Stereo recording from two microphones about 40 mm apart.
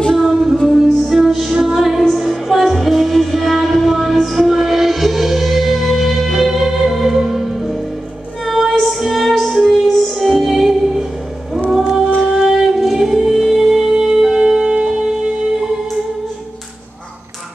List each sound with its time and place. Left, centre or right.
0.2 s music: centre
10.1 s music: centre
12.2 s music: centre